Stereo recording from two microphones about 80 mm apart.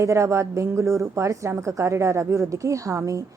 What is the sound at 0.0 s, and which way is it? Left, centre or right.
A woman's voice, right.